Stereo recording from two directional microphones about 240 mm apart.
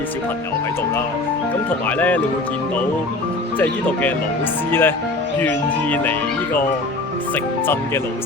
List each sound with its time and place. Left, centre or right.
2.0 s speech: centre
3.6 s speech: centre